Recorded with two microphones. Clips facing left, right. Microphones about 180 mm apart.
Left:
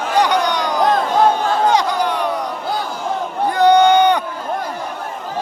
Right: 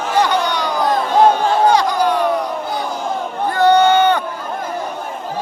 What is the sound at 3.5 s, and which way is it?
Run, 15° left (ahead or behind).